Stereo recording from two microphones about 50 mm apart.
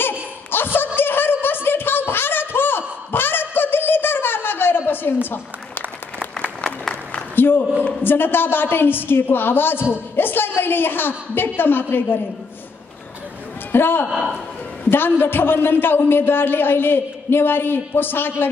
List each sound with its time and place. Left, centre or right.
0.5 s a sound: left
7.3 s a sound: left
8.0 s a woman's voice: left
13.7 s a man's voice: left
14.0 s a man's voice: centre
14.9 s speech: left